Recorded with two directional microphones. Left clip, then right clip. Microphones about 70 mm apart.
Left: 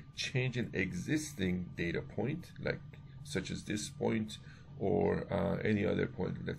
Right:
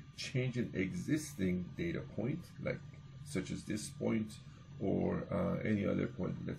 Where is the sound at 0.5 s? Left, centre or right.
Left.